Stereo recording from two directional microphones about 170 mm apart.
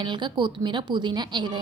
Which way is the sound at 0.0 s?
30° right (ahead or behind).